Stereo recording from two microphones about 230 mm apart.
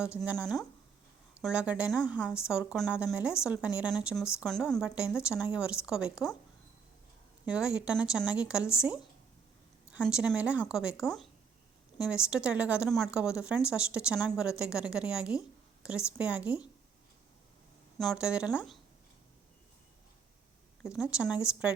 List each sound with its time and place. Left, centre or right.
1.4 s a woman's voice: centre
7.4 s a woman's voice: centre
17.9 s a woman's voice: centre
20.8 s a woman's voice: centre